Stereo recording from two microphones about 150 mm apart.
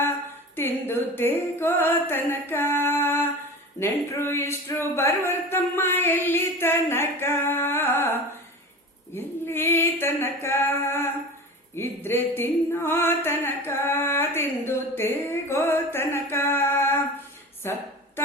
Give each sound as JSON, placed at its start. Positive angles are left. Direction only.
{"t": 0.5, "sound": "music", "side_deg": 15}